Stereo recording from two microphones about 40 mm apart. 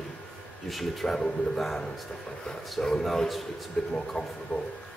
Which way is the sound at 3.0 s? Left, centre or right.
Centre.